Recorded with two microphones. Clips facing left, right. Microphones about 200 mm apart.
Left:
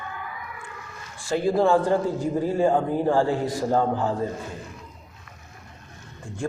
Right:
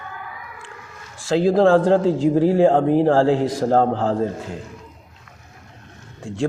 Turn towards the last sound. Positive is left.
turn(degrees=-90)